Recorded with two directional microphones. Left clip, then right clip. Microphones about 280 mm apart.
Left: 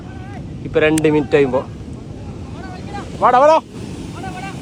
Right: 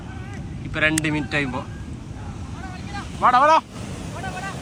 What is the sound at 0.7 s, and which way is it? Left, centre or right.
Speech, centre.